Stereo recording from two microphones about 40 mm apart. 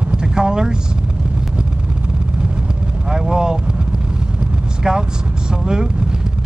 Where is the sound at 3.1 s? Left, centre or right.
Centre.